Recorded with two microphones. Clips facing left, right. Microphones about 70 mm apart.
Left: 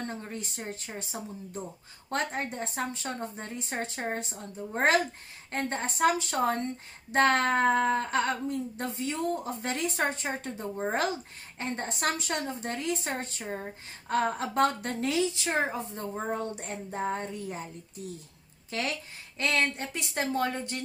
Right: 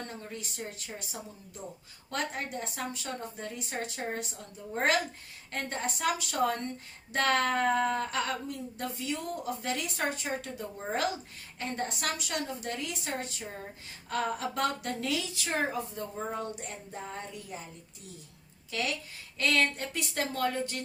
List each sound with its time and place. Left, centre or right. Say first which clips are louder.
0.1 s speech: left 4 dB; left
2.0 s speech: left 3 dB; left
16.1 s speech: left 4 dB; left
18.7 s speech: left 1 dB; left
19.4 s speech: even; left